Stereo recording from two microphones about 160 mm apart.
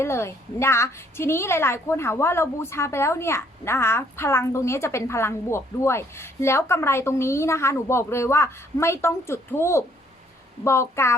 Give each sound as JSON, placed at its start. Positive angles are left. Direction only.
{"t": 0.0, "sound": "a woman's voice", "side_deg": 15}